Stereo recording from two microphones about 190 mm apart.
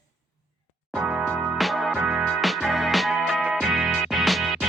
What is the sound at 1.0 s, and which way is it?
Music, centre (ahead or behind).